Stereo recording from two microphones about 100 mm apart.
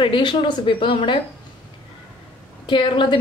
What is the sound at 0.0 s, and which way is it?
Speech, 50° left (ahead or behind).